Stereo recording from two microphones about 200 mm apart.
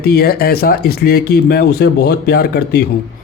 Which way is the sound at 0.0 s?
50° left (ahead or behind).